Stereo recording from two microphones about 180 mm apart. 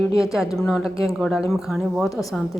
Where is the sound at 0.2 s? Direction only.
Centre (ahead or behind).